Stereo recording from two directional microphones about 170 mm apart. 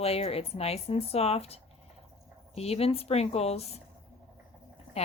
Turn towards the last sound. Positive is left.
turn(degrees=35)  # may be behind; listen again after turning